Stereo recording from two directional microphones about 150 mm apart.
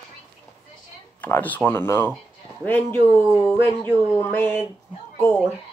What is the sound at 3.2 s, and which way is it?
Speech, 10° right (ahead or behind).